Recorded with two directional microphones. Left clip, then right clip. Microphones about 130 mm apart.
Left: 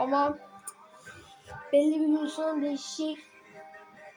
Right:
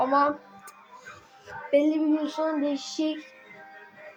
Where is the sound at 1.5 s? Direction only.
Centre (ahead or behind).